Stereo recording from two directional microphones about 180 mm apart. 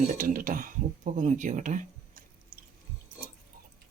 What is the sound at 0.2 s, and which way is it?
Speech, 50° right (ahead or behind).